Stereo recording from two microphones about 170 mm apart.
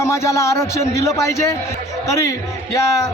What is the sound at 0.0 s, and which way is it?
A man's voice, 15° left (ahead or behind).